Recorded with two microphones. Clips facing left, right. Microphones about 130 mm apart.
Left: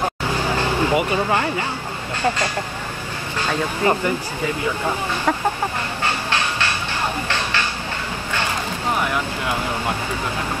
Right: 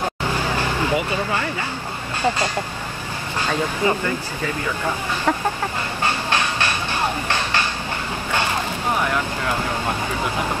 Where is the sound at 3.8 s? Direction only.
20° right (ahead or behind).